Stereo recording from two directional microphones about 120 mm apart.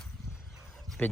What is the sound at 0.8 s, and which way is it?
Dog, 10° left (ahead or behind).